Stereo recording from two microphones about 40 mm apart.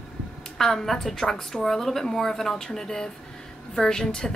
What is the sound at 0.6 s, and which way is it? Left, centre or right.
A woman's voice, centre.